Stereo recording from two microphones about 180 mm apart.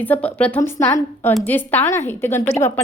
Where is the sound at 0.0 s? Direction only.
10° left (ahead or behind).